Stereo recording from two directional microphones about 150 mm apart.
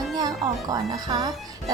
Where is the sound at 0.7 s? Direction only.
25° right (ahead or behind).